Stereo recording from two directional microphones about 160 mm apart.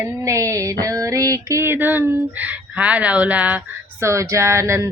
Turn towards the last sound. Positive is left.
turn(degrees=-15)  # may be behind; listen again after turning